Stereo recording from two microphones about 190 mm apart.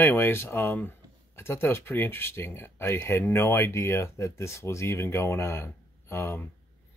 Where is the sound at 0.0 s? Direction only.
10° left (ahead or behind).